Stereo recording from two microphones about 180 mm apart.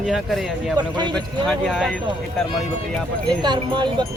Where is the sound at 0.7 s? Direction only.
25° right (ahead or behind).